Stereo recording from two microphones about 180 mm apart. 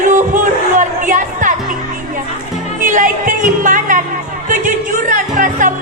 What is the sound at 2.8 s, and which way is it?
Music, 45° right (ahead or behind).